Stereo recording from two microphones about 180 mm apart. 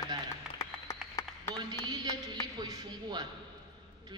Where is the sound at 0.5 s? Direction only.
20° left (ahead or behind).